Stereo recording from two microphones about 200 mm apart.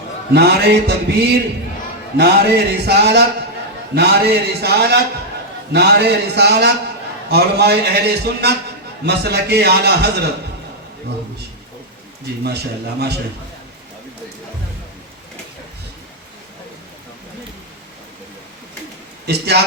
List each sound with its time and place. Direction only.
0.3 s a man's voice: 55° right (ahead or behind)
12.4 s a man's voice: 55° right (ahead or behind)